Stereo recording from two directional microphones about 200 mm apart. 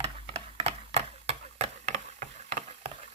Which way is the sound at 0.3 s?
25° right (ahead or behind).